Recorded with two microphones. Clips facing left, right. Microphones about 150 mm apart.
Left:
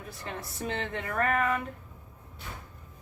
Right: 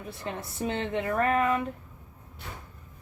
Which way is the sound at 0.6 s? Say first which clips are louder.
Right 5 dB; 25° right (ahead or behind).